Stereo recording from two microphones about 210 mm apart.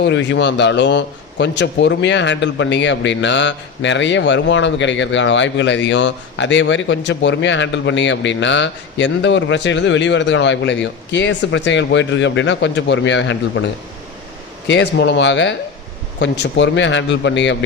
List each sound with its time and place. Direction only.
0.0 s a man's voice: 60° left (ahead or behind)
14.7 s a man's voice: 60° left (ahead or behind)